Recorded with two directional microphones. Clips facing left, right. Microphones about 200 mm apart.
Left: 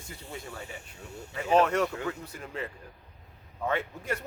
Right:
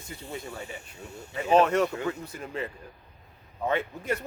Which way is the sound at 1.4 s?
20° right (ahead or behind).